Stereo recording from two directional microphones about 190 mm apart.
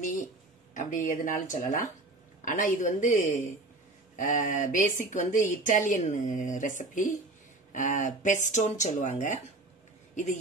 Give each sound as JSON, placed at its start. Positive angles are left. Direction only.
{"t": 0.7, "sound": "speech", "side_deg": 45}